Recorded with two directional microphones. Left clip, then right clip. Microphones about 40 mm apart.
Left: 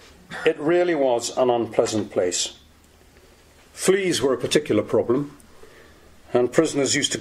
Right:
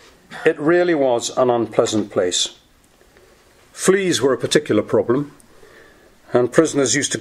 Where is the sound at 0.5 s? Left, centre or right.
Right.